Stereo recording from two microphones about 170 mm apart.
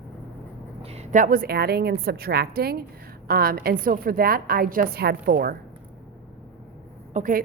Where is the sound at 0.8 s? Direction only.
40° right (ahead or behind); by 5.5 s 60° right (ahead or behind).